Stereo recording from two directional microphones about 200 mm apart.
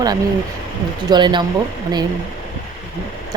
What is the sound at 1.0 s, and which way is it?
Speech, 20° right (ahead or behind).